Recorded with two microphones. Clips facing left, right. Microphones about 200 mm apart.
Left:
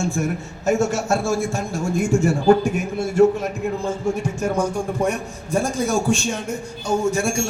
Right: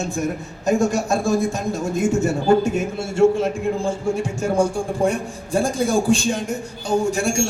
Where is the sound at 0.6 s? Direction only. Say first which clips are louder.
Right 1 dB; 15° right (ahead or behind).